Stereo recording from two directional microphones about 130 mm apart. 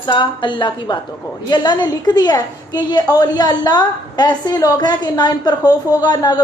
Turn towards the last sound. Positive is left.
turn(degrees=30)  # may be behind; listen again after turning